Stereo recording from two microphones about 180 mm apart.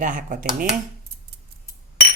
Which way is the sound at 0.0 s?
45° right (ahead or behind).